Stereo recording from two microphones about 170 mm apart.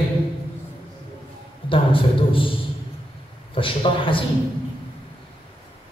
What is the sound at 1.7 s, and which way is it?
Speech, 30° left (ahead or behind).